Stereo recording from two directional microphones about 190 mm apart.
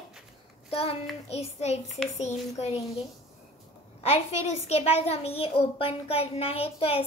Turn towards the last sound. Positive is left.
turn(degrees=30)  # may be behind; listen again after turning